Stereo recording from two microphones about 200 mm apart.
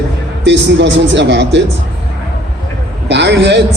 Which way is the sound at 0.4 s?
60° right (ahead or behind).